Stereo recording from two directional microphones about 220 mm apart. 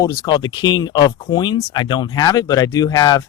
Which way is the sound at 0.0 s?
15° left (ahead or behind).